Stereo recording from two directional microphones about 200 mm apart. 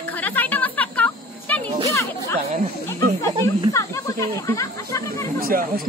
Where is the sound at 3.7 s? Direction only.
15° left (ahead or behind).